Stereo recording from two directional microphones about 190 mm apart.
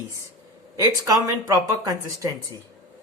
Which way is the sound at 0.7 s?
15° right (ahead or behind).